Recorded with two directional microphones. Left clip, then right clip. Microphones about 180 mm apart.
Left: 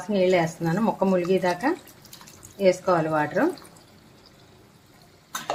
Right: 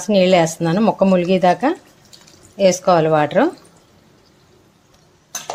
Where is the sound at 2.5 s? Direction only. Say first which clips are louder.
Right 7 dB; 60° right (ahead or behind).